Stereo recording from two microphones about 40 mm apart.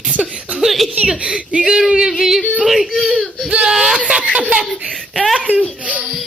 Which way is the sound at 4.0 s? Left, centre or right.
Right.